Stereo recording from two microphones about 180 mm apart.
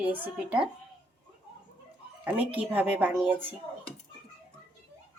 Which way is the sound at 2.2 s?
10° right (ahead or behind).